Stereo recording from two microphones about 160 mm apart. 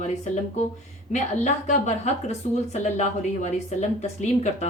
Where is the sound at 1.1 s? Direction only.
45° left (ahead or behind).